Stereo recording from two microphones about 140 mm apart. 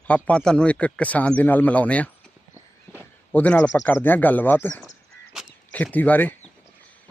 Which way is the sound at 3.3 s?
10° left (ahead or behind).